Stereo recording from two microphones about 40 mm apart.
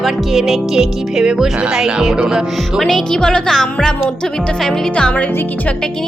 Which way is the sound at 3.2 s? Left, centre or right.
Centre.